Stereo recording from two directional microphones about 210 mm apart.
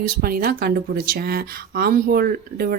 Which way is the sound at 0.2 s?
45° right (ahead or behind).